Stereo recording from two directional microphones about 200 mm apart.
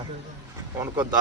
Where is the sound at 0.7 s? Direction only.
15° right (ahead or behind).